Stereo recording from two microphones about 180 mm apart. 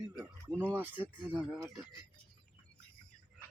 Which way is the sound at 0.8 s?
10° right (ahead or behind).